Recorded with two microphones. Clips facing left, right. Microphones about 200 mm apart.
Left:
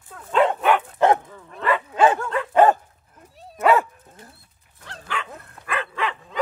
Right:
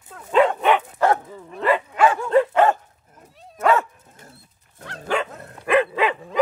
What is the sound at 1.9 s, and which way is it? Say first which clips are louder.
Dog: right 2 dB; 25° left (ahead or behind).